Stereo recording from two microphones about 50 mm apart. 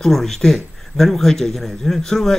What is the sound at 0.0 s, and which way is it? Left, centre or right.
A man's voice, centre.